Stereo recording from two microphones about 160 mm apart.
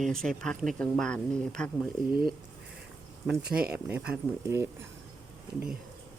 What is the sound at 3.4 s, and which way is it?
Speech, 70° right (ahead or behind).